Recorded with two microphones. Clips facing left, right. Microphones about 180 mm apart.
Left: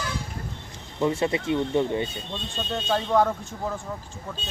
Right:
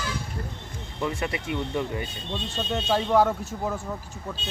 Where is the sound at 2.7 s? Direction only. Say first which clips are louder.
Right 1 dB; 5° right (ahead or behind).